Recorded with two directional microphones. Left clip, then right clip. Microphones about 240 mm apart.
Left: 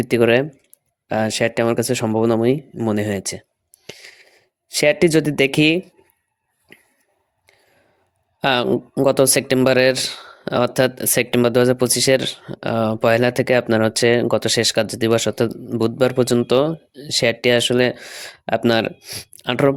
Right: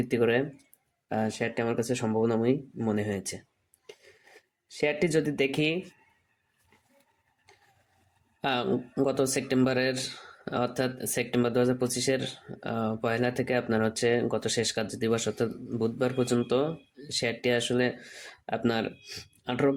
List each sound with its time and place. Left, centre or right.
0.0 s speech: left
3.8 s a sound: left
8.4 s speech: left